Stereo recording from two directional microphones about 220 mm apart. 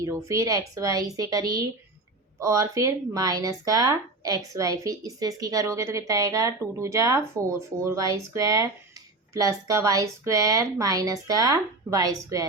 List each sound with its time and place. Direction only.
0.0 s speech: 15° right (ahead or behind)